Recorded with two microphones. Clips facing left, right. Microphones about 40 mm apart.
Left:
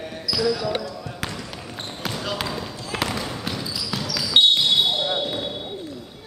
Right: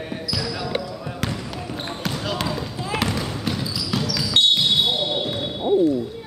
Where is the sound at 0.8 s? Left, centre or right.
Centre.